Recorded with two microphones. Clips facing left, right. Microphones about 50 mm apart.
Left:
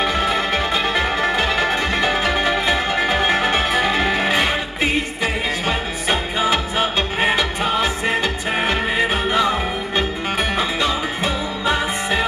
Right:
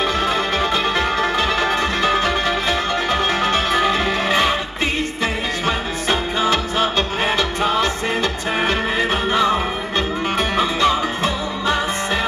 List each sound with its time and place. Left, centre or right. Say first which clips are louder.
0.0 s music: even; centre